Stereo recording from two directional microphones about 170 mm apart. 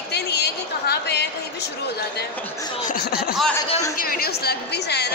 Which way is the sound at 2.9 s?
65° left (ahead or behind).